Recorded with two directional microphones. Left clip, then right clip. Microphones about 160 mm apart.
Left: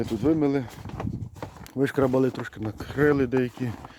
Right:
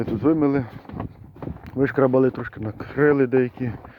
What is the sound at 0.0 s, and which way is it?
Speech, 20° left (ahead or behind).